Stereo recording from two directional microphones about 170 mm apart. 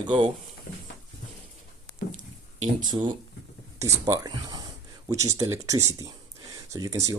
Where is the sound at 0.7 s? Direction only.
65° left (ahead or behind).